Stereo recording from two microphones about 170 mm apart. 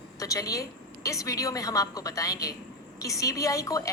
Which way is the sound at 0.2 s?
20° left (ahead or behind).